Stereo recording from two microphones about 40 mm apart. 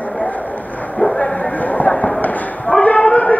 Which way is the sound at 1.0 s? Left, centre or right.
Left.